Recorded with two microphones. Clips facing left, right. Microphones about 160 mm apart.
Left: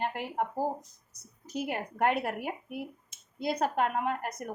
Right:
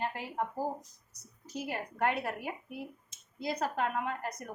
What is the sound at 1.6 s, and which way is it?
Speech, 55° left (ahead or behind).